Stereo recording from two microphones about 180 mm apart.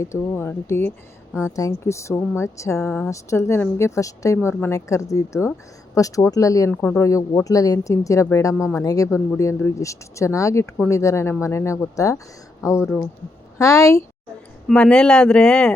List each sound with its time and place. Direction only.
0.0 s speech: 15° left (ahead or behind)
2.8 s speech: 5° left (ahead or behind)
3.1 s speech: 15° left (ahead or behind)
14.7 s speech: 5° left (ahead or behind)